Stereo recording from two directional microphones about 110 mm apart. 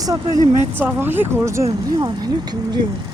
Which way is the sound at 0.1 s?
20° right (ahead or behind).